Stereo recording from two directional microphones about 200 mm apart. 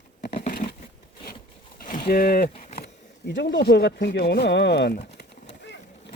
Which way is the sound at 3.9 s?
50° left (ahead or behind).